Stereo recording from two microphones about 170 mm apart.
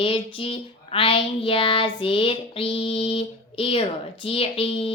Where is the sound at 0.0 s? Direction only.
30° left (ahead or behind).